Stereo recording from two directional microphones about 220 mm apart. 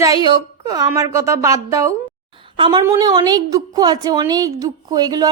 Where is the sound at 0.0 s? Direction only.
15° right (ahead or behind).